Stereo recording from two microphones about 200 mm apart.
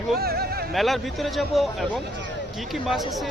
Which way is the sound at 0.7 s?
Centre (ahead or behind).